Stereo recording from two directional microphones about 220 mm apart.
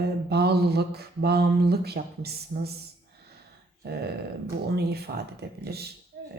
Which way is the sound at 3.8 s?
45° right (ahead or behind).